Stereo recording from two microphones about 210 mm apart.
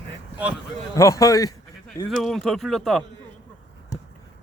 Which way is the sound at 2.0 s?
Centre (ahead or behind).